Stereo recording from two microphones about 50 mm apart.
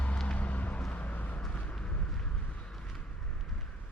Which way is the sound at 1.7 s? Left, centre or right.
Centre.